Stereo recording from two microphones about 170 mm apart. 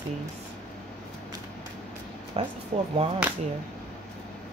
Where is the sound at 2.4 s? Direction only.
35° right (ahead or behind).